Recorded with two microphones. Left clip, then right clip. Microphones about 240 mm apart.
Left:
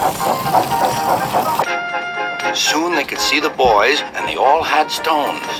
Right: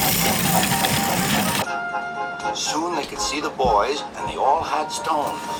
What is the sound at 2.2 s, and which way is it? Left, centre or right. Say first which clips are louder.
Music: left 7 dB; left.